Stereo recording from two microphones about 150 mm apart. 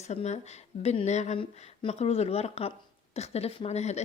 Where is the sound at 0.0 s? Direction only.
50° left (ahead or behind).